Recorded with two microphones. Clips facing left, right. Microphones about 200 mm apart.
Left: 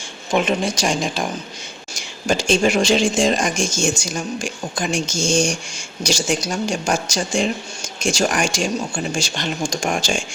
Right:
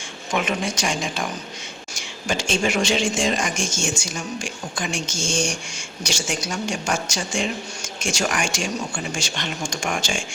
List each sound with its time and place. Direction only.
0.3 s speech: 30° left (ahead or behind)